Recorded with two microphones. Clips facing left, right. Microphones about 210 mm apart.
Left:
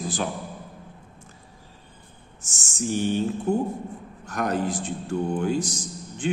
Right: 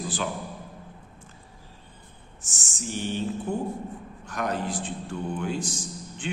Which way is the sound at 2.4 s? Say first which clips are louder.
Left 7 dB; 45° left (ahead or behind).